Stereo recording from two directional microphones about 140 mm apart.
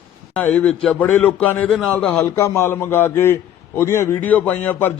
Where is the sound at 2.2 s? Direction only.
20° left (ahead or behind).